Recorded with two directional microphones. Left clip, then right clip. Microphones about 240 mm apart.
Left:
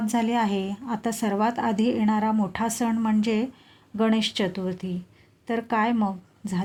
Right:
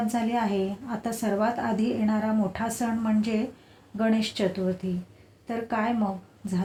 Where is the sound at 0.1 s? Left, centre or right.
Left.